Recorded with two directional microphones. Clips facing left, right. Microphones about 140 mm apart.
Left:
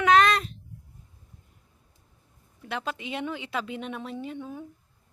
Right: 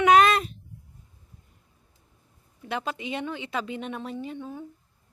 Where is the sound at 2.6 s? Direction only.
Centre (ahead or behind).